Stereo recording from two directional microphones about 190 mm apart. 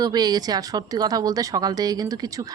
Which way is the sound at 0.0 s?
20° right (ahead or behind).